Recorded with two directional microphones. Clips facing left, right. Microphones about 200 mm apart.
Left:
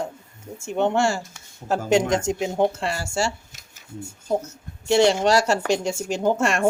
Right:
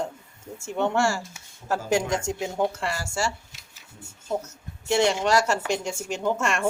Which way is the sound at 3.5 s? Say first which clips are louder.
Left 2 dB; 45° left (ahead or behind).